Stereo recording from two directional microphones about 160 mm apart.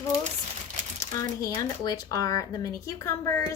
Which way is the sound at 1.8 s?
20° left (ahead or behind).